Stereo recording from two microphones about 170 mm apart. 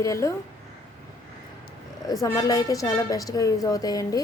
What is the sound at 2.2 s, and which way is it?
A woman's voice, 20° left (ahead or behind).